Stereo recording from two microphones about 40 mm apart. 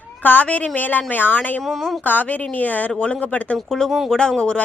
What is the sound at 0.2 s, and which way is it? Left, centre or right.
Speech, left.